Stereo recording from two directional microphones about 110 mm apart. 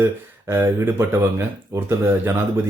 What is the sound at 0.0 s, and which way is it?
Speech, 20° right (ahead or behind).